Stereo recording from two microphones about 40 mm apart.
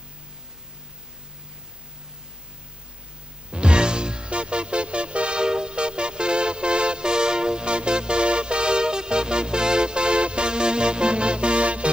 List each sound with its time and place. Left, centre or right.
3.5 s music: right